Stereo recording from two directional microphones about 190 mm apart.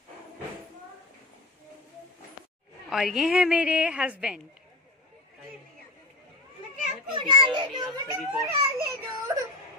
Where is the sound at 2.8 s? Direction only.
Centre (ahead or behind).